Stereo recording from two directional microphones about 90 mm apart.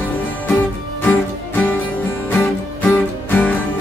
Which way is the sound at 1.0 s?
20° left (ahead or behind).